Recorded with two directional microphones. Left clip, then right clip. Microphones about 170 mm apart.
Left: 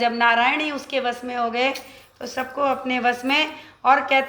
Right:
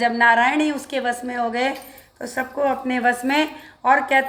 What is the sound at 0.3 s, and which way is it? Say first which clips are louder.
A woman's voice: right 2 dB; 15° right (ahead or behind).